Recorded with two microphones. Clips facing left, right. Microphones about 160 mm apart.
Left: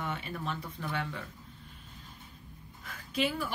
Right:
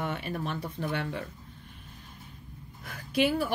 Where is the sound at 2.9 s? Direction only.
60° right (ahead or behind).